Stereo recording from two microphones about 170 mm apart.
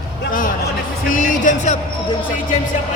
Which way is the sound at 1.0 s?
50° left (ahead or behind).